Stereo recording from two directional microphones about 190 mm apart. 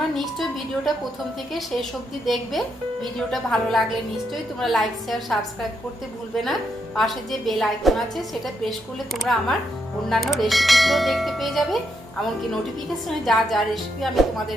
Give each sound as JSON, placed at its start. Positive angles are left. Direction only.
{"t": 1.5, "sound": "speech", "side_deg": 0}
{"t": 13.2, "sound": "speech", "side_deg": 0}